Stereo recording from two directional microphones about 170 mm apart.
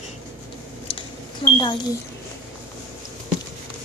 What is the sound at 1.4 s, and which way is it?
Speech, 30° left (ahead or behind).